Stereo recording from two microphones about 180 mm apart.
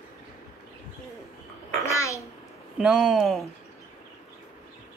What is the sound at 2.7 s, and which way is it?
Speech, centre (ahead or behind).